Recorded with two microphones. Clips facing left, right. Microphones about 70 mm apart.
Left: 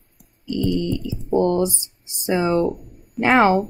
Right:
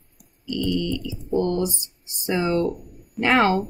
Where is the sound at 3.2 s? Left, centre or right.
Left.